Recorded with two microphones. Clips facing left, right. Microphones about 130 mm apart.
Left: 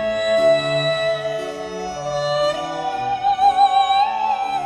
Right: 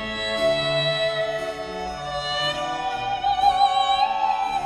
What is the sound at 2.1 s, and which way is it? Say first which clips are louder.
Music: left 12 dB; 40° left (ahead or behind).